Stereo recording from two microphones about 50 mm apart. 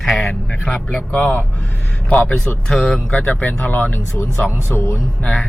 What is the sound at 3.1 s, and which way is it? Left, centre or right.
Speech, left.